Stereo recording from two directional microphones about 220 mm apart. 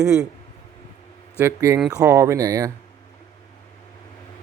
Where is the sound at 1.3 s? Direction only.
10° right (ahead or behind).